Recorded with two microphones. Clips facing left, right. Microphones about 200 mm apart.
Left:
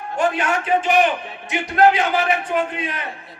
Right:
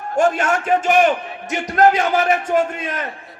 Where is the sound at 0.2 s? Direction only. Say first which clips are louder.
Right 3 dB; 45° right (ahead or behind).